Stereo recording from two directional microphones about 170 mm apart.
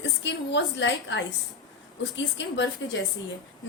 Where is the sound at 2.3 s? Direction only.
90° left.